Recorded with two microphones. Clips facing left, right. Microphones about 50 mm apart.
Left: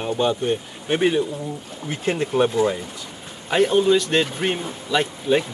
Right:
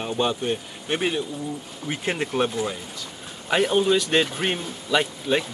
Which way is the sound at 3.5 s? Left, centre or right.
Centre.